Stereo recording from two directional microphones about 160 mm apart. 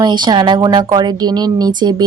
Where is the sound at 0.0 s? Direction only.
25° right (ahead or behind).